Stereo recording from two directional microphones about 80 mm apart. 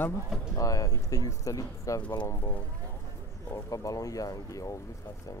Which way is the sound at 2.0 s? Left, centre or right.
Left.